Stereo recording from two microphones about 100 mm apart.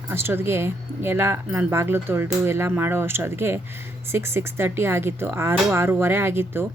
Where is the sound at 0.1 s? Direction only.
25° right (ahead or behind).